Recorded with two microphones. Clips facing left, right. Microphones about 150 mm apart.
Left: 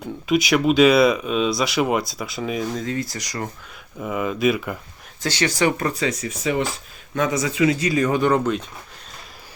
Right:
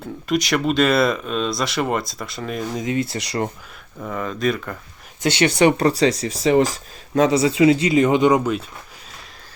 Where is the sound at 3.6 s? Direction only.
Centre (ahead or behind).